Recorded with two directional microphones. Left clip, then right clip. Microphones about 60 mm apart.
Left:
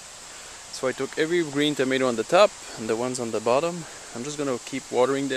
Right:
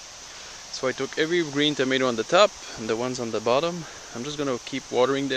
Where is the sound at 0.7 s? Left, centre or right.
Left.